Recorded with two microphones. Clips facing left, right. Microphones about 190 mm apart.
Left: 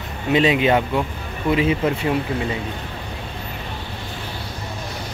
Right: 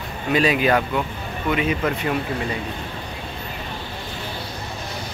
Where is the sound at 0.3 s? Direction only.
25° left (ahead or behind).